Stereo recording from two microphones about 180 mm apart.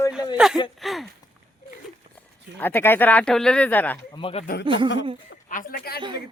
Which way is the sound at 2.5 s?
10° left (ahead or behind).